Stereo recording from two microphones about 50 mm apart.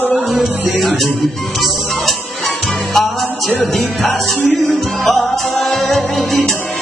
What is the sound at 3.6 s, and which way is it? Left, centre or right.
Music, centre.